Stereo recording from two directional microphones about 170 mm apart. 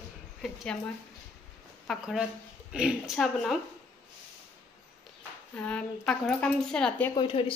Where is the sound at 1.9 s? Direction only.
Centre (ahead or behind).